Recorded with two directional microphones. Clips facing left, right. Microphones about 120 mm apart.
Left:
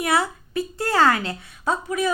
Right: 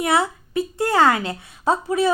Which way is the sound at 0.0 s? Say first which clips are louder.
Right 2 dB; 25° right (ahead or behind).